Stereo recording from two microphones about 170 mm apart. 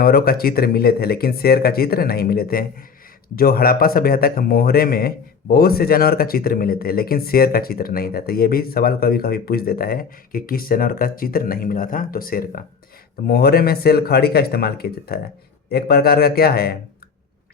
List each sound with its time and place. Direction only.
0.0 s speech: 60° left (ahead or behind)